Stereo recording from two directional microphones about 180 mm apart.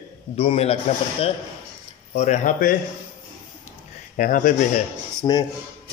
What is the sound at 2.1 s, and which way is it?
Speech, 40° left (ahead or behind).